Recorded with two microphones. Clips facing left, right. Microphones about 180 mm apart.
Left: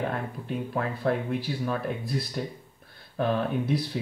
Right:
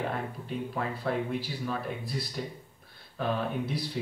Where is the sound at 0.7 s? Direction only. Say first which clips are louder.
Left 4 dB; 50° left (ahead or behind).